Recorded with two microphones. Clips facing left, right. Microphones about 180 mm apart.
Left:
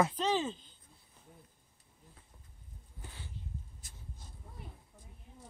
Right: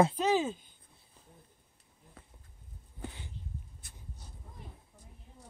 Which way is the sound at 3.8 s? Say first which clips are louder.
Right 1 dB; 60° right (ahead or behind).